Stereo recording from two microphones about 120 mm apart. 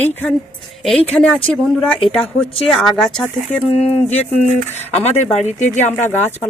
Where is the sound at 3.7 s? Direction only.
70° left (ahead or behind).